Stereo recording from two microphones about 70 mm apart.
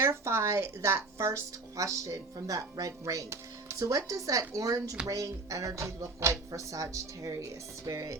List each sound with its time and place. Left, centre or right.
0.0 s a woman's voice: right